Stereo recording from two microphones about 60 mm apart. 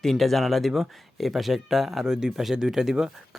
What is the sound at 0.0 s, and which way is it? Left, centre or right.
Speech, centre.